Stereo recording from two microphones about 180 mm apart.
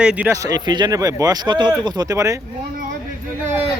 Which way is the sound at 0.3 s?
20° right (ahead or behind).